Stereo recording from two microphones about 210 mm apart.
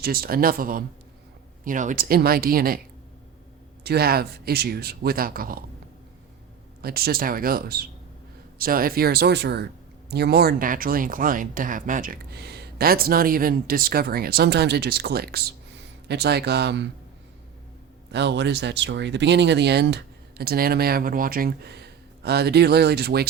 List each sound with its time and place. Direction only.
0.0 s speech: 45° right (ahead or behind)
3.8 s speech: 45° right (ahead or behind)
6.8 s speech: 45° right (ahead or behind)
18.1 s speech: 55° right (ahead or behind)